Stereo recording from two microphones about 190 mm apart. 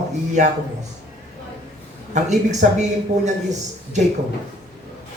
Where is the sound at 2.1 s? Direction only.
40° right (ahead or behind).